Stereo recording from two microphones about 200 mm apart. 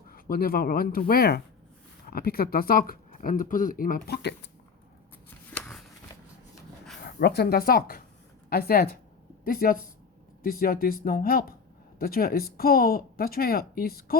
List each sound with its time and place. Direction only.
0.1 s speech: 45° left (ahead or behind)
5.5 s a sound: 5° left (ahead or behind)
7.0 s speech: 55° left (ahead or behind)